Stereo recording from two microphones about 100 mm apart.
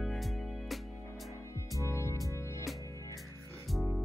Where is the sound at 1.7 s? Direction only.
30° left (ahead or behind).